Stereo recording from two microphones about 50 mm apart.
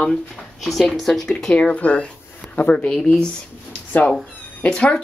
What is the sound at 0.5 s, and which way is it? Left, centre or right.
Speech, centre.